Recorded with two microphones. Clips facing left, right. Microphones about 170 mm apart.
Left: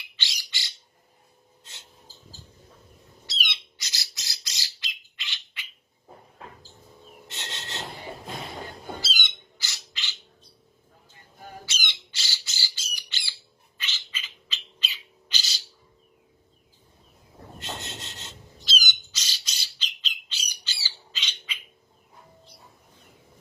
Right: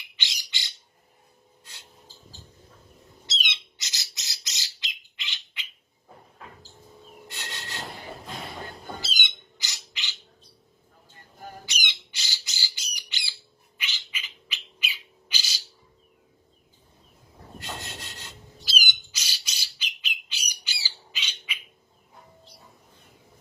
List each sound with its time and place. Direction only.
0.2 s squawk: 20° right (ahead or behind)
1.7 s a sound: 25° left (ahead or behind)
3.2 s bird: 20° right (ahead or behind)
7.3 s rub: 25° left (ahead or behind)
9.0 s bird: 20° right (ahead or behind)
11.6 s squawk: 15° right (ahead or behind)
13.7 s bird: 15° right (ahead or behind)
17.6 s rub: 20° left (ahead or behind)
18.6 s squawk: 10° right (ahead or behind)